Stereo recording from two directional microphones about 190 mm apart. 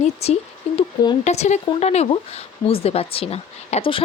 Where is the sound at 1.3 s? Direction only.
35° left (ahead or behind).